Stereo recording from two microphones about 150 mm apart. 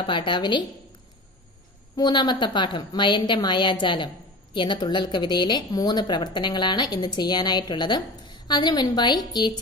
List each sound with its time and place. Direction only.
0.0 s a woman's voice: 35° left (ahead or behind)
2.0 s a woman's voice: 30° left (ahead or behind)